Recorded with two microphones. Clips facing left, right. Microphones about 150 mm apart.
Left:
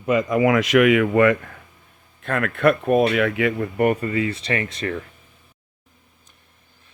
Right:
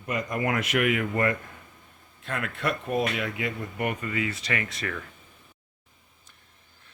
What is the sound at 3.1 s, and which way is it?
Speech, 70° left (ahead or behind).